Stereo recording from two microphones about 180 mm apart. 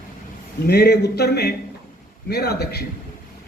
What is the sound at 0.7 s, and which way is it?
A man's voice, 65° left (ahead or behind).